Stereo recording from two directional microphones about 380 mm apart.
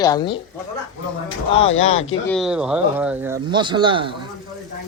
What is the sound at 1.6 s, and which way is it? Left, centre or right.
Speech, left.